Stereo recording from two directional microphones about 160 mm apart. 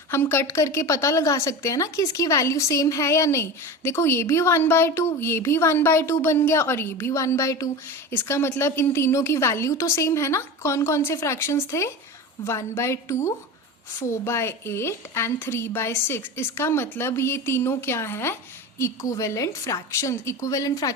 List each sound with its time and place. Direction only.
0.1 s a woman's voice: 15° left (ahead or behind)